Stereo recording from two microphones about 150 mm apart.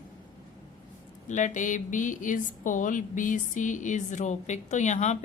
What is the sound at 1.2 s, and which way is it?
A woman's voice, 55° left (ahead or behind).